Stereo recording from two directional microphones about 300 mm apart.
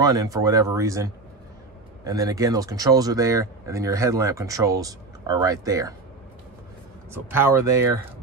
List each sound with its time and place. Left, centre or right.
0.0 s speech: centre
7.2 s speech: centre